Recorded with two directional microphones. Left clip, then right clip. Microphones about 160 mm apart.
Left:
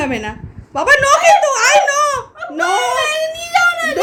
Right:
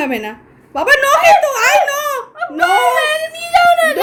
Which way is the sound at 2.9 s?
50° right (ahead or behind).